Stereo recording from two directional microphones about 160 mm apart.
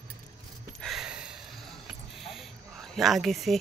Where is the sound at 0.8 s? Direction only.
Centre (ahead or behind).